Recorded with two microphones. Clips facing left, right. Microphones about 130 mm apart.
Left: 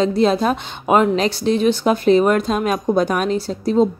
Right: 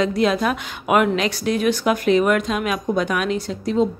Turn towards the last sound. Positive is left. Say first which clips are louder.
# left 4 dB
turn(degrees=35)  # may be behind; listen again after turning